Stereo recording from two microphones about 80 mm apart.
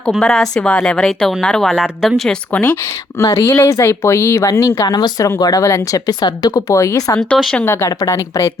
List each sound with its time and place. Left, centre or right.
0.1 s speech: centre
2.5 s speech: centre
3.2 s speech: left
6.1 s speech: left
6.7 s speech: left
7.2 s speech: centre
7.6 s a woman's voice: left